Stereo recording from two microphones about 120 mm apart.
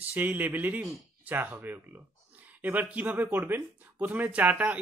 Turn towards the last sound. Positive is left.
turn(degrees=-10)  # may be behind; listen again after turning